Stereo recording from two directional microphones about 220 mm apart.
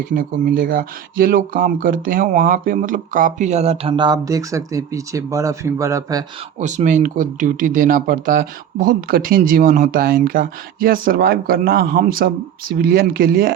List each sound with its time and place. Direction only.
0.1 s speech: 40° right (ahead or behind); by 6.2 s 15° right (ahead or behind)
6.6 s speech: 35° right (ahead or behind)